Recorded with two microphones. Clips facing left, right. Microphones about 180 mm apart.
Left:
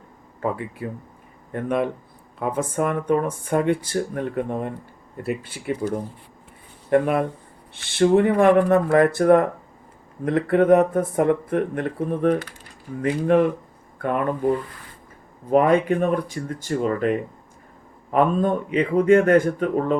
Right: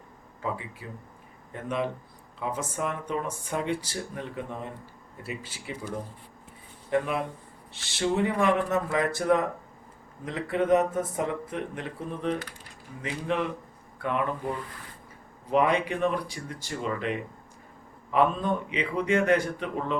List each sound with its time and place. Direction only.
0.4 s speech: 55° left (ahead or behind)
6.9 s a man's voice: 55° left (ahead or behind)
15.4 s a man's voice: 45° left (ahead or behind)